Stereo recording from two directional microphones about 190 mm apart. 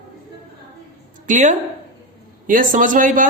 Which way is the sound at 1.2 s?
40° right (ahead or behind).